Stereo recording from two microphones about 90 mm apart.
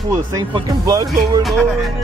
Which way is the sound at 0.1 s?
40° right (ahead or behind).